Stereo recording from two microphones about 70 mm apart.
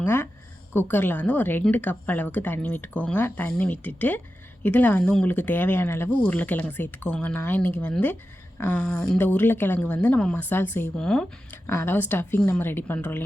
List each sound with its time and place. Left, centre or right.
0.0 s speech: left
6.1 s speech: left
10.3 s speech: left
10.9 s speech: centre
11.5 s speech: left